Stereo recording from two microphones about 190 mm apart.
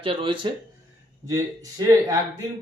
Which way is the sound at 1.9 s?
20° right (ahead or behind).